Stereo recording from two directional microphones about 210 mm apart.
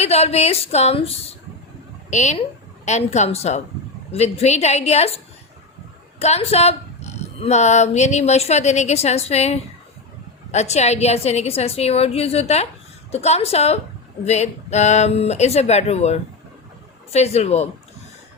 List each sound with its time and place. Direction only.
0.0 s a woman's voice: 30° left (ahead or behind)